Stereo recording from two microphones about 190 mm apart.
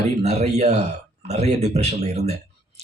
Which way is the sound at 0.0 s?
35° right (ahead or behind).